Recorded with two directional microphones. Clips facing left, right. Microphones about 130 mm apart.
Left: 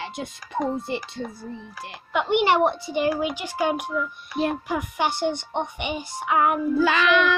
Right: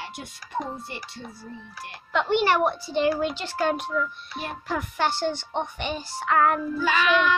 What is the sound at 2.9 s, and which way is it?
A child's voice, 10° left (ahead or behind).